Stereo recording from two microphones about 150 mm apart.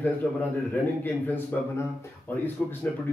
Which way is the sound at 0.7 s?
10° left (ahead or behind).